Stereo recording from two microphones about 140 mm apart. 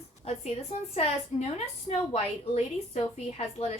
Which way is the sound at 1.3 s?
50° left (ahead or behind).